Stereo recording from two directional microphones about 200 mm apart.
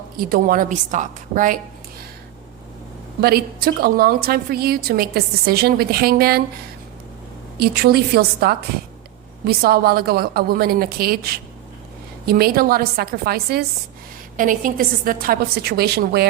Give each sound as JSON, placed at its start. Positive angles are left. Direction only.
{"t": 0.2, "sound": "a woman's voice", "side_deg": -45}
{"t": 3.2, "sound": "a woman's voice", "side_deg": -50}
{"t": 7.6, "sound": "a woman's voice", "side_deg": -50}